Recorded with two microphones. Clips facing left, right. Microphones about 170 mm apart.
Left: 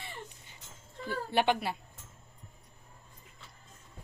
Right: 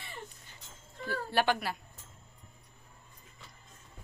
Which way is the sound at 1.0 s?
20° left (ahead or behind).